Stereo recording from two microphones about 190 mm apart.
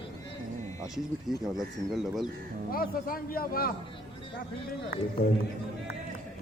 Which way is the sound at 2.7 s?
50° left (ahead or behind).